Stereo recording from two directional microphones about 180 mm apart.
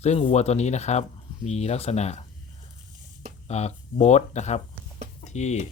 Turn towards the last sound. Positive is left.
turn(degrees=40)  # may be behind; listen again after turning